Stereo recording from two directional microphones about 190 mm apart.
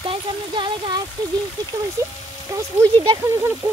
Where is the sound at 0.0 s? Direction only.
25° right (ahead or behind).